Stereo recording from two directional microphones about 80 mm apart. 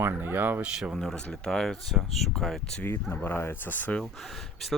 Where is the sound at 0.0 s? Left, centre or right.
Right.